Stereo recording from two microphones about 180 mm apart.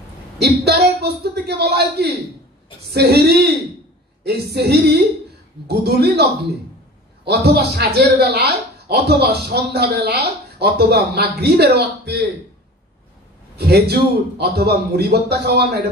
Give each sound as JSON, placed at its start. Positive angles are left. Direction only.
{"t": 0.4, "sound": "speech", "side_deg": -65}
{"t": 7.2, "sound": "speech", "side_deg": -60}
{"t": 13.6, "sound": "speech", "side_deg": -65}